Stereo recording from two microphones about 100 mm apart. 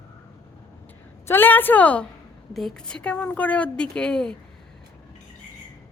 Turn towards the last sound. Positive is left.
turn(degrees=5)  # may be behind; listen again after turning